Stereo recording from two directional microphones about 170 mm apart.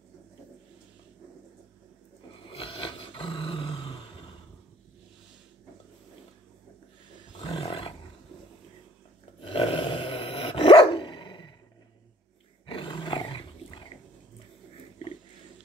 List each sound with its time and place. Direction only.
2.4 s dog: 30° left (ahead or behind)
7.4 s roar: 35° left (ahead or behind)
9.4 s dog: 30° left (ahead or behind)
12.6 s roar: 30° left (ahead or behind)